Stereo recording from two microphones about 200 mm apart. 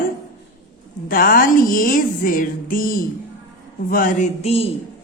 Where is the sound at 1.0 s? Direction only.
45° left (ahead or behind); by 4.7 s 30° left (ahead or behind).